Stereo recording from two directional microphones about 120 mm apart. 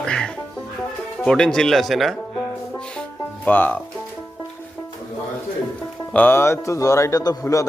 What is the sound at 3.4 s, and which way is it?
Speech, 15° left (ahead or behind).